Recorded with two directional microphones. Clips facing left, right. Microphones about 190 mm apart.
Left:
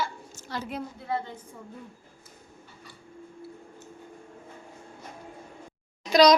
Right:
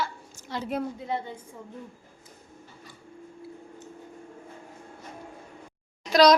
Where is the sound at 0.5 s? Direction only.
25° right (ahead or behind).